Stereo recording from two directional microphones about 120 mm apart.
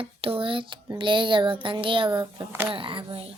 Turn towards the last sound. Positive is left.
turn(degrees=-45)  # may be behind; listen again after turning